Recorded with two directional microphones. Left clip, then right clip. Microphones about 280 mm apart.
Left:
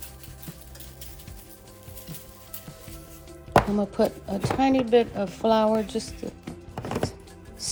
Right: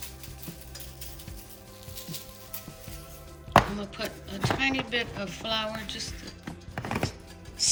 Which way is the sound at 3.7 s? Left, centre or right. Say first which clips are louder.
Left 11 dB; centre.